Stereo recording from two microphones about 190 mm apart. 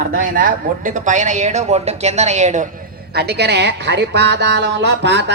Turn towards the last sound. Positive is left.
turn(degrees=-65)  # may be behind; listen again after turning